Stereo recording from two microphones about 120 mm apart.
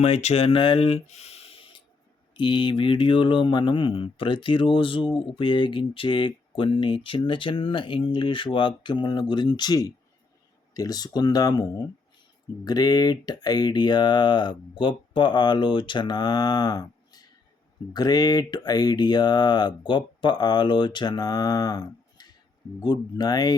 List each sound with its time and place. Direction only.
0.0 s speech: 65° left (ahead or behind)
1.0 s snort: 65° left (ahead or behind); by 1.8 s 50° left (ahead or behind)
2.3 s speech: 40° left (ahead or behind)